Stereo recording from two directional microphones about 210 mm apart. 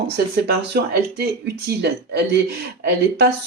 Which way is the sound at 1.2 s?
50° right (ahead or behind).